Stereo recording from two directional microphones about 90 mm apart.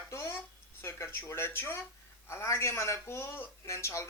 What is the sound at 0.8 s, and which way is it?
Speech, 25° left (ahead or behind).